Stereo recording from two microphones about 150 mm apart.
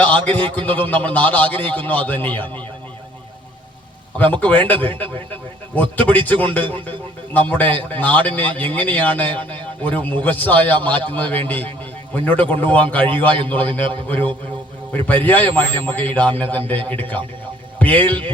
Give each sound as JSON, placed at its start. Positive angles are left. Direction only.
{"t": 0.3, "sound": "a man's voice", "side_deg": 10}
{"t": 4.4, "sound": "a man's voice", "side_deg": 10}